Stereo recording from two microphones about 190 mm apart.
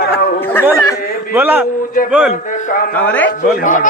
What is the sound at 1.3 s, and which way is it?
Music, 10° right (ahead or behind).